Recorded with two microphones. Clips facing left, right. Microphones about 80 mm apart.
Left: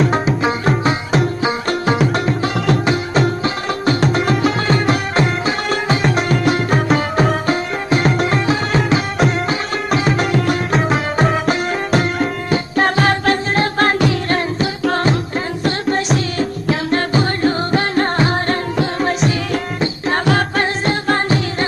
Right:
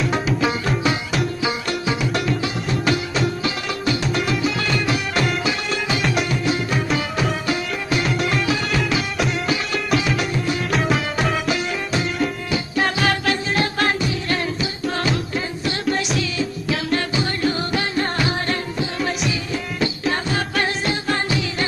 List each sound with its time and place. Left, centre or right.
0.0 s music: left
10.3 s music: left
10.7 s music: left